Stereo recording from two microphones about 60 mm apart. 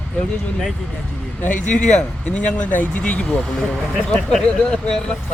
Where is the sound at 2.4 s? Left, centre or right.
Left.